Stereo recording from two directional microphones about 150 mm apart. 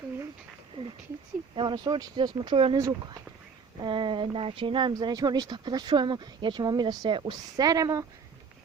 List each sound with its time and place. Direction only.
1.5 s speech: 30° right (ahead or behind)
2.7 s speech: 25° right (ahead or behind)